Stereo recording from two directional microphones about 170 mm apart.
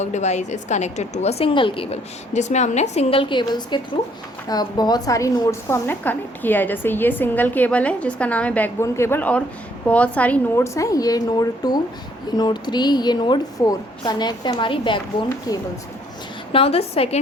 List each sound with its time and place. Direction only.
0.0 s a woman's voice: 40° left (ahead or behind); by 15.6 s 20° left (ahead or behind)
16.5 s a woman's voice: 35° left (ahead or behind)